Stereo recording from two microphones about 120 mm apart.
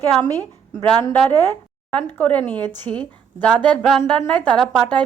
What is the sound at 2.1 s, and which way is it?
A woman's voice, 15° left (ahead or behind).